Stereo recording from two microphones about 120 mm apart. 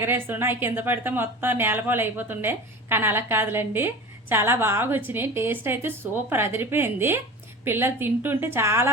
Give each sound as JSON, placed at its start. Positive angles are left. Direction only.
{"t": 0.0, "sound": "a woman's voice", "side_deg": -20}